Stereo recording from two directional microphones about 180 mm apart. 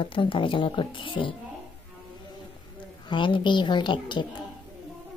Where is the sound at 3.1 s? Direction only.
25° left (ahead or behind).